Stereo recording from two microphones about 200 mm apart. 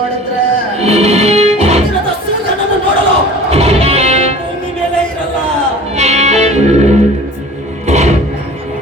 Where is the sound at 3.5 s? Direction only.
30° right (ahead or behind).